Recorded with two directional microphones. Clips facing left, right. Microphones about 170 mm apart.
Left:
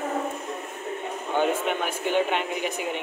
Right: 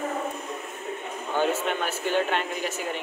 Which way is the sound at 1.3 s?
15° left (ahead or behind).